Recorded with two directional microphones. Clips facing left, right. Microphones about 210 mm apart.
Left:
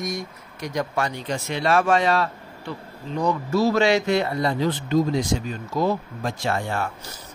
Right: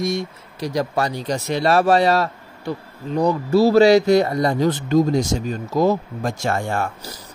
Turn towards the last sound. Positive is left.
turn(degrees=-45)  # may be behind; listen again after turning